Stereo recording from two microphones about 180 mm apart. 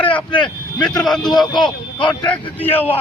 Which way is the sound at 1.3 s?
25° left (ahead or behind).